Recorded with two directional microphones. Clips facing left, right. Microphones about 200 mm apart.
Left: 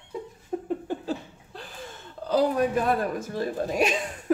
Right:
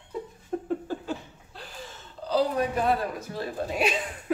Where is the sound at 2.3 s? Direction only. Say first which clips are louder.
Left 2 dB; 50° left (ahead or behind).